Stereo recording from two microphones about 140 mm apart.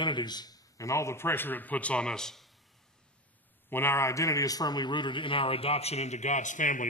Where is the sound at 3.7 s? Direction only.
15° left (ahead or behind).